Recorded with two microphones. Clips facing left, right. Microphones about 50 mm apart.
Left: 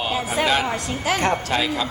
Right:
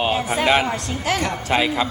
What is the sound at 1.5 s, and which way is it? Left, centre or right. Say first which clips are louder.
Speech: right 3 dB; right.